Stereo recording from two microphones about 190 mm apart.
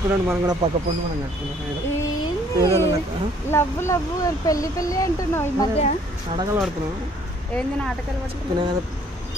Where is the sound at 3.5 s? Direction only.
15° left (ahead or behind).